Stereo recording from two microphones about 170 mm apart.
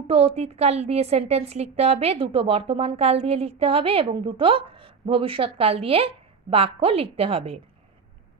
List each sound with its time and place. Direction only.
0.0 s a woman's voice: 35° right (ahead or behind)